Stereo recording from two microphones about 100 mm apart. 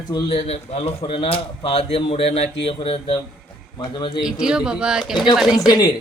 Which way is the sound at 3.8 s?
50° left (ahead or behind).